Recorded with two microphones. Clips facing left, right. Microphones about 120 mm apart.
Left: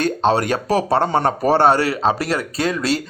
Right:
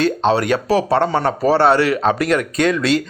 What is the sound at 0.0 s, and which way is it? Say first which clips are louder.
Speech: right 1 dB; 45° left (ahead or behind).